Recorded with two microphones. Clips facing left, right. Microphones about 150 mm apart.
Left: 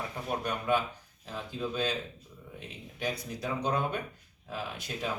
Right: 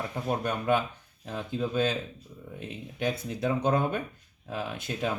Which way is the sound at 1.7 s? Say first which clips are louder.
Right 5 dB; 50° right (ahead or behind).